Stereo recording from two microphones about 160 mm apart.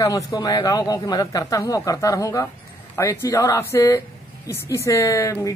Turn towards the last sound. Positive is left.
turn(degrees=20)  # may be behind; listen again after turning